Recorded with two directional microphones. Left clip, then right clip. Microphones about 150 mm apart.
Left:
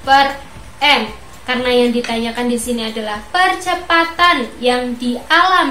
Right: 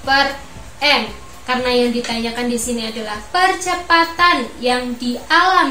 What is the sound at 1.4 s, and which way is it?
A woman's voice, 20° left (ahead or behind).